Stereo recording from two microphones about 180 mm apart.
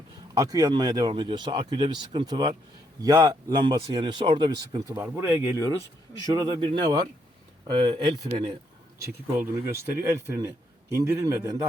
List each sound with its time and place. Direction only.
0.3 s speech: 20° right (ahead or behind)